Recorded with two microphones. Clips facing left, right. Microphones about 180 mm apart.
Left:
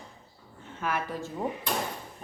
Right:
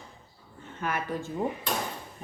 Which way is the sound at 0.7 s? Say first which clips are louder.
Even; centre (ahead or behind).